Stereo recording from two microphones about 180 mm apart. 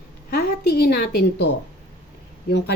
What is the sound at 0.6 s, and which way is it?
Speech, 60° left (ahead or behind).